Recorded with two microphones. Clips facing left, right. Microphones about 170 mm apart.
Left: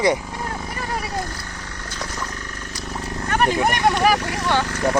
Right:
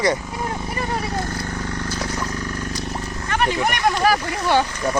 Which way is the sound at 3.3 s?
40° left (ahead or behind).